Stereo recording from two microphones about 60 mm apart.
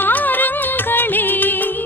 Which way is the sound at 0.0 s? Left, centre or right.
Left.